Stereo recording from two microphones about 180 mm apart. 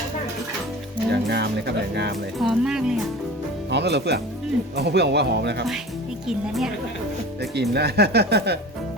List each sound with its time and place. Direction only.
1.1 s speech: 65° right (ahead or behind)
2.4 s speech: 5° right (ahead or behind)
3.7 s speech: 70° right (ahead or behind)
6.2 s speech: centre (ahead or behind)
7.5 s speech: 65° right (ahead or behind)